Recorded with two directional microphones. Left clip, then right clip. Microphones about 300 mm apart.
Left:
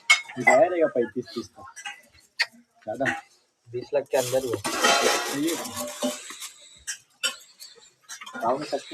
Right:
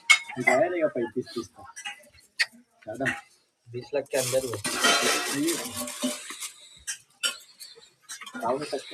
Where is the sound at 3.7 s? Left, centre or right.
Left.